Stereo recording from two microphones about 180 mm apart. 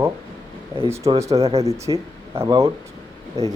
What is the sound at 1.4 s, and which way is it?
Speech, 35° right (ahead or behind).